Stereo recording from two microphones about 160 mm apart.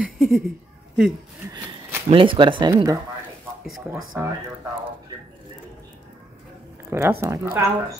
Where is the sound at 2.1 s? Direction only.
30° right (ahead or behind).